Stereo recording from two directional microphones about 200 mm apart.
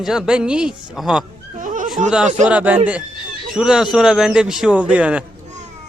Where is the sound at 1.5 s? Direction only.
40° right (ahead or behind).